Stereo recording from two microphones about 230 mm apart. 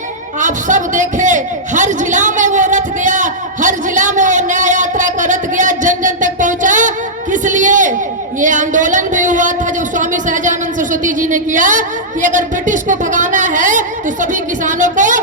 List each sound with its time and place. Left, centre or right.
0.3 s a man's voice: right